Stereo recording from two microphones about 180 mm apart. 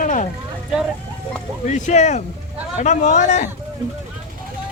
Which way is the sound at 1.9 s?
40° left (ahead or behind).